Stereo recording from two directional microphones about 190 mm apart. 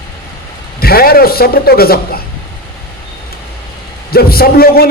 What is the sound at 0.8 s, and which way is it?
A man's voice, 55° left (ahead or behind).